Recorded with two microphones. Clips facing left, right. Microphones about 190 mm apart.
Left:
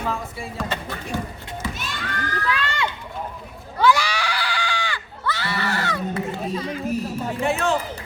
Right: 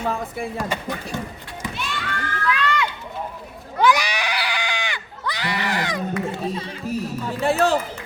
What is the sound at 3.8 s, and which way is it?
Goat, 15° right (ahead or behind).